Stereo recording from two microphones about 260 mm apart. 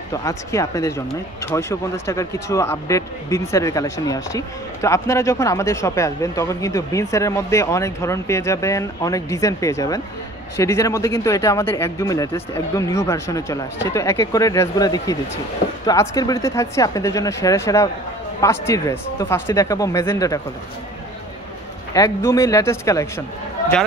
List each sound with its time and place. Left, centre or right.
0.1 s speech: centre
21.9 s speech: centre